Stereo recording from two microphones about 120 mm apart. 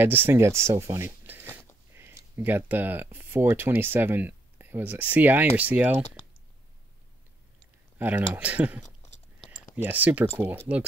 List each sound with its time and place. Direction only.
0.0 s speech: 15° right (ahead or behind)
1.2 s a sound: 15° right (ahead or behind)
2.0 s speech: 20° right (ahead or behind)
8.0 s speech: 10° right (ahead or behind)